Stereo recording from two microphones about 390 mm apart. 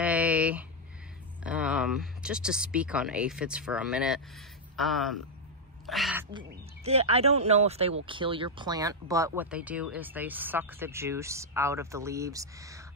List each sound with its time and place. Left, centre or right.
0.0 s a sound: centre
1.4 s speech: centre
6.5 s speech: centre